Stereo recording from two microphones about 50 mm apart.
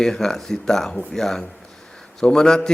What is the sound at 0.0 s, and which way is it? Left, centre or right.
A man's voice, centre.